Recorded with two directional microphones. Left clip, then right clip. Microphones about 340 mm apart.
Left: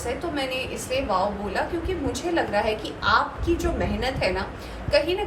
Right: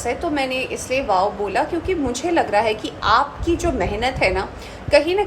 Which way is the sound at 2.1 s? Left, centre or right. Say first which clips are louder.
Right 6 dB; centre.